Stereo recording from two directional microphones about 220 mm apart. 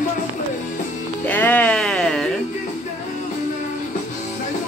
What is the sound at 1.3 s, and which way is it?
Sheep, 10° left (ahead or behind).